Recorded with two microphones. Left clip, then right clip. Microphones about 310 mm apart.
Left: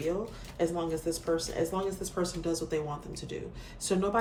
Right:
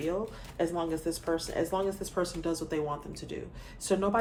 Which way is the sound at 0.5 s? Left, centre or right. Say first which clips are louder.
Even; right.